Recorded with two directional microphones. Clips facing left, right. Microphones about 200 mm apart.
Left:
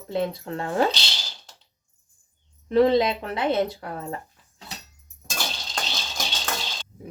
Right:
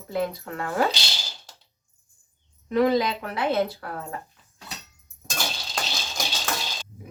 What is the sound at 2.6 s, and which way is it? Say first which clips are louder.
Speech: left 3 dB; 30° left (ahead or behind).